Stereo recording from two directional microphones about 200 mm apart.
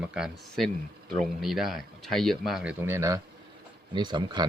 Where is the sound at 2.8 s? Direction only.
15° right (ahead or behind).